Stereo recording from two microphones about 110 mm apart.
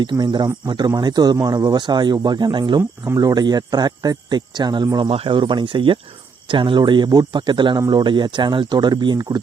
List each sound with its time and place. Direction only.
0.0 s speech: 45° right (ahead or behind)